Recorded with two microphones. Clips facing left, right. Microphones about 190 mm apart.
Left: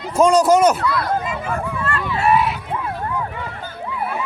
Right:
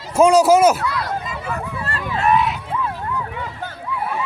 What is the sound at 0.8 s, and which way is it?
Speech, 50° left (ahead or behind).